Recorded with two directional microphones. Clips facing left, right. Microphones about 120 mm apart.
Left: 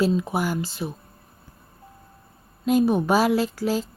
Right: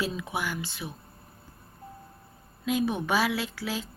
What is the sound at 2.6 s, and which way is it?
Speech, 40° left (ahead or behind).